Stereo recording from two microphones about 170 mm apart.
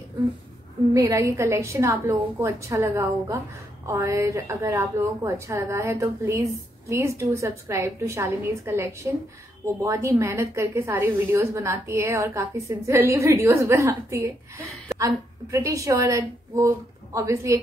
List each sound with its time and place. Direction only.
0.9 s a woman's voice: 20° right (ahead or behind)